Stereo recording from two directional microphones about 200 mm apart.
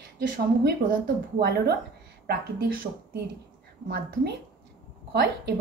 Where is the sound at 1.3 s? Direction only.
55° right (ahead or behind).